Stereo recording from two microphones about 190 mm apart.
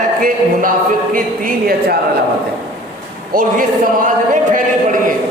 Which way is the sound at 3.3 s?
45° right (ahead or behind).